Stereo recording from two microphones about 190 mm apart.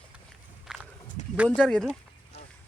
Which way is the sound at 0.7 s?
5° right (ahead or behind).